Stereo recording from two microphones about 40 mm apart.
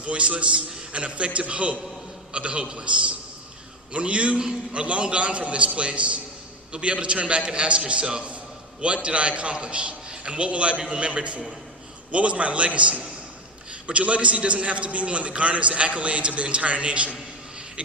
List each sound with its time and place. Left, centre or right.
0.0 s a man's voice: right